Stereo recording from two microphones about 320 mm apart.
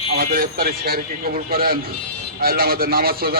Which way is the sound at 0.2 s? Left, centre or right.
Right.